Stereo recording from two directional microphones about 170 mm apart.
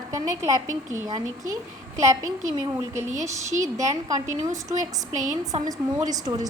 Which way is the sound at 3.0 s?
45° right (ahead or behind).